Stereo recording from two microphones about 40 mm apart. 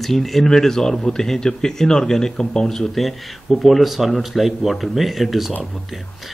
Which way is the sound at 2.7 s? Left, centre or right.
Centre.